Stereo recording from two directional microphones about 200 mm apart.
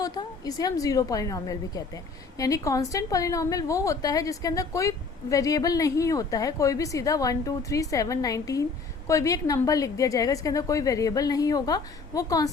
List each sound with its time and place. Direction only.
0.0 s a woman's voice: 20° left (ahead or behind)